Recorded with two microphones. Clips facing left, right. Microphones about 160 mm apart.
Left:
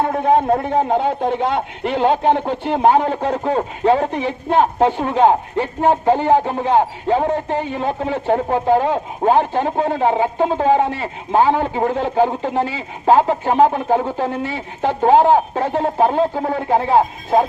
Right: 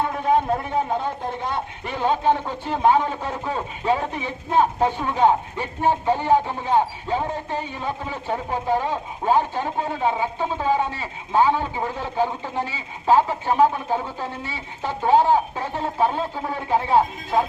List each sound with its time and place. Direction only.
0.0 s speech: 50° left (ahead or behind)
0.9 s speech: 70° left (ahead or behind); by 4.2 s 50° left (ahead or behind)
4.2 s speech: 75° left (ahead or behind)
4.9 s speech: 45° left (ahead or behind)